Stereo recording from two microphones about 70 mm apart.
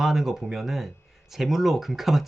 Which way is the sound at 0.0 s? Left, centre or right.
Centre.